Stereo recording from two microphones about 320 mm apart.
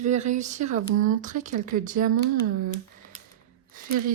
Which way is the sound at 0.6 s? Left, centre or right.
Right.